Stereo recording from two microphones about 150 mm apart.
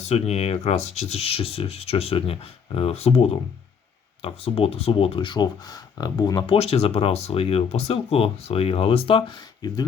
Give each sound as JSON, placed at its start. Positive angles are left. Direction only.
{"t": 0.0, "sound": "speech", "side_deg": 45}